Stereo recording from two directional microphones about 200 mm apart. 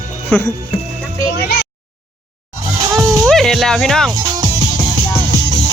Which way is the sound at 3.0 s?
15° right (ahead or behind).